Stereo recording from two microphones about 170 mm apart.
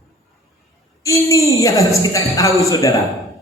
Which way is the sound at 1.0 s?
20° left (ahead or behind).